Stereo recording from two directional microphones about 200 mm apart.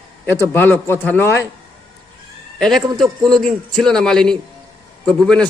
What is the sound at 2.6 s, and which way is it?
A man's voice, centre (ahead or behind).